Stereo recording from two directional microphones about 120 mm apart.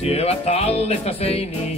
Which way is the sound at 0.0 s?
60° left (ahead or behind).